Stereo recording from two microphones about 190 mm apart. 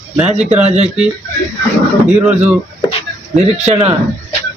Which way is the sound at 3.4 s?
35° right (ahead or behind).